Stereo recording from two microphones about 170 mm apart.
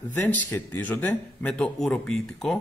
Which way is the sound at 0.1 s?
10° left (ahead or behind).